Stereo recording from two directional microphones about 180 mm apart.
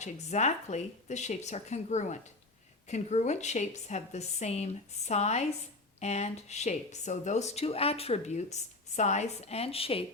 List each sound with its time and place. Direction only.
0.0 s speech: 40° left (ahead or behind)